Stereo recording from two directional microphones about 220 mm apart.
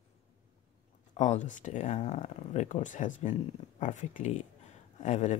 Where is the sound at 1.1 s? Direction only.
35° left (ahead or behind).